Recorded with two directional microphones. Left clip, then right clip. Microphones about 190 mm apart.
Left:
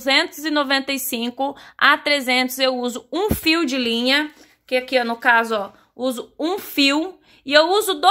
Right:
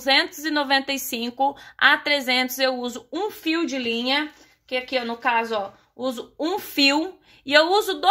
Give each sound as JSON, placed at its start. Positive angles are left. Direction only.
{"t": 0.0, "sound": "a woman's voice", "side_deg": 20}